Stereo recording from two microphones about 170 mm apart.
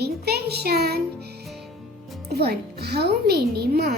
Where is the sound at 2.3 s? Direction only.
70° right (ahead or behind).